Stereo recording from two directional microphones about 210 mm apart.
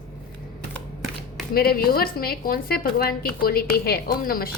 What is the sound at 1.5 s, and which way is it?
Speech, 45° left (ahead or behind).